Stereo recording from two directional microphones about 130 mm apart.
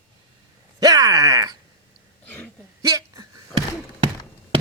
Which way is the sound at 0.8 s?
30° right (ahead or behind).